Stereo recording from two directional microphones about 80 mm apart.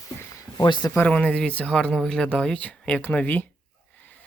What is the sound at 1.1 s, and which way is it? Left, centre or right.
Speech, centre.